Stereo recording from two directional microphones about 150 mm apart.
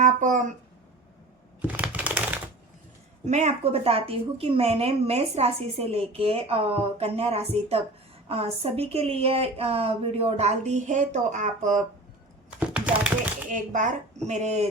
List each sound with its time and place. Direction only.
0.0 s speech: 60° right (ahead or behind)
1.6 s typing: 10° right (ahead or behind)
3.2 s a woman's voice: 50° right (ahead or behind)
12.5 s a sound: 10° right (ahead or behind)
13.5 s a woman's voice: 60° right (ahead or behind)